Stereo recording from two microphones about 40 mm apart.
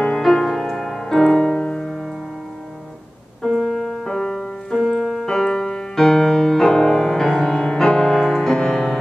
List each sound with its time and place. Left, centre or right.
0.2 s music: centre
3.6 s music: centre
8.5 s music: centre